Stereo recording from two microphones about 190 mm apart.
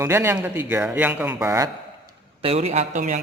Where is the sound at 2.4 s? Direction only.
35° right (ahead or behind).